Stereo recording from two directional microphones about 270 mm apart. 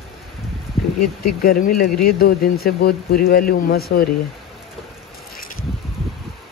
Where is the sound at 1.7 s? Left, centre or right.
Left.